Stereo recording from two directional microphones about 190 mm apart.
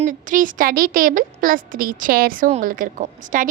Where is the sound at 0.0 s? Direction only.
45° right (ahead or behind).